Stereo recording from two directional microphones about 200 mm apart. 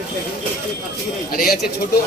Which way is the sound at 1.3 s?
45° left (ahead or behind).